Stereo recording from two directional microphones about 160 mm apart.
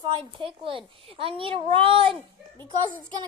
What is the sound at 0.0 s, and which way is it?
A woman's voice, 30° right (ahead or behind).